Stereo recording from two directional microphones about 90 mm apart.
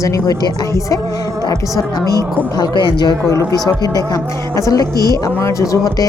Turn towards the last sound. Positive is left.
turn(degrees=40)  # may be behind; listen again after turning